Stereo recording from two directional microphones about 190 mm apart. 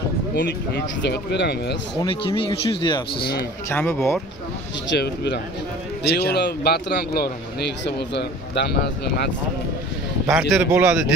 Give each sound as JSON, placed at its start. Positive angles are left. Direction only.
{"t": 0.4, "sound": "speech", "side_deg": 60}
{"t": 2.0, "sound": "speech", "side_deg": 25}
{"t": 3.2, "sound": "speech", "side_deg": 55}
{"t": 3.6, "sound": "speech", "side_deg": 10}
{"t": 4.9, "sound": "speech", "side_deg": 60}
{"t": 10.5, "sound": "speech", "side_deg": -5}